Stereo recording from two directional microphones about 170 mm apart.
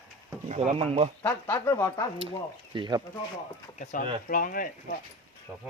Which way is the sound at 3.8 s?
45° left (ahead or behind).